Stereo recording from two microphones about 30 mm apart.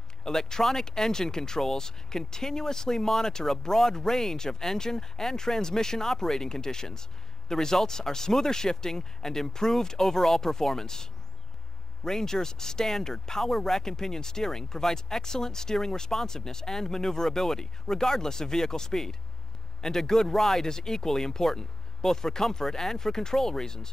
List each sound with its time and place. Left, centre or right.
0.2 s speech: centre
20.1 s speech: centre
20.6 s speech: centre